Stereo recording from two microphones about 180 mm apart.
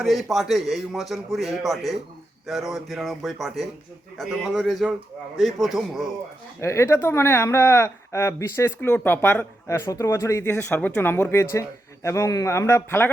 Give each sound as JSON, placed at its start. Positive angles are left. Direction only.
{"t": 0.0, "sound": "a man's voice", "side_deg": 0}
{"t": 6.6, "sound": "speech", "side_deg": 15}